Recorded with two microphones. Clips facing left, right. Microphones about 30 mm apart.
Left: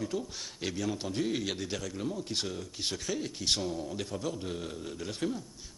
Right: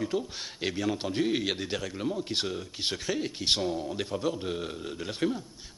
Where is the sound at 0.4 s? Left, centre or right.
Right.